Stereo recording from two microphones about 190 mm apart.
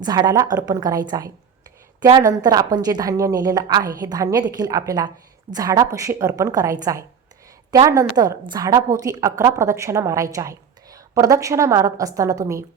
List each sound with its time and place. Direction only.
0.0 s a woman's voice: 20° right (ahead or behind)